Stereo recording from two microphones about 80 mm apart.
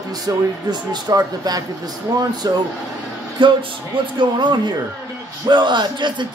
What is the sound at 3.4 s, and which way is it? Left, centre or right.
Speech, right.